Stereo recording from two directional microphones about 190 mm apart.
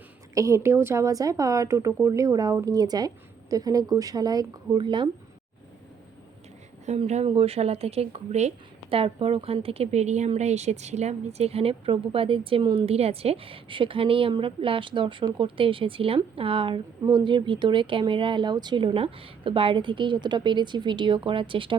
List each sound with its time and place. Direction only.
0.3 s a woman's voice: 15° right (ahead or behind)
6.8 s speech: 35° right (ahead or behind)